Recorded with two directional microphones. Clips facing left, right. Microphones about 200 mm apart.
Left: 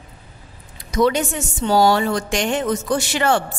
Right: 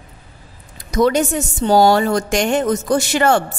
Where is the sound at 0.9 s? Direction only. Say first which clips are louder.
Right 3 dB; 45° right (ahead or behind).